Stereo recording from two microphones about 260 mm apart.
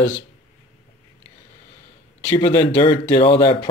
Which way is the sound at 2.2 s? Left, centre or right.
Centre.